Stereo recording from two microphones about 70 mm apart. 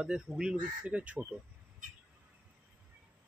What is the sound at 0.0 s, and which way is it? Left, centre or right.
Speech, centre.